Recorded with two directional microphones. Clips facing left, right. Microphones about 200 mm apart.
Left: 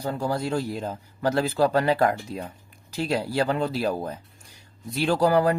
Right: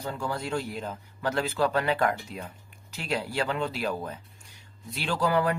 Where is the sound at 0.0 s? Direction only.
35° left (ahead or behind).